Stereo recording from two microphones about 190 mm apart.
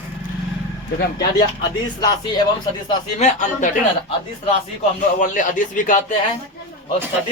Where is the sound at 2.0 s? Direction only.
20° left (ahead or behind).